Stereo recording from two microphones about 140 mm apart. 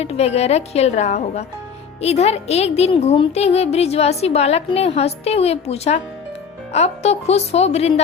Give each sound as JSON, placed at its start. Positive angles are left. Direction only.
{"t": 0.0, "sound": "a woman's voice", "side_deg": 50}